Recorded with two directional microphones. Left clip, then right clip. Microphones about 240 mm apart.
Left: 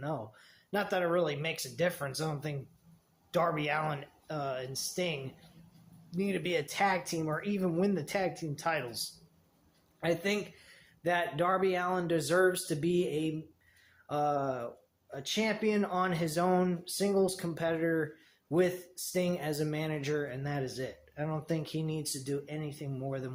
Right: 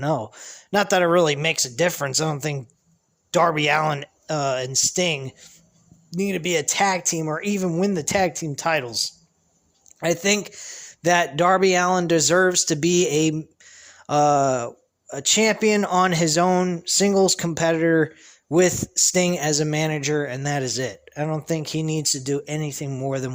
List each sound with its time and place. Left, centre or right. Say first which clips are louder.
0.0 s speech: right 14 dB; right